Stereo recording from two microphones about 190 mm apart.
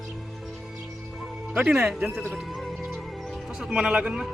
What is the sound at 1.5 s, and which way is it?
Speech, 5° right (ahead or behind).